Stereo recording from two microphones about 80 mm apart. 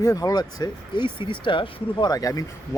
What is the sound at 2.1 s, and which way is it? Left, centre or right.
Speech, left.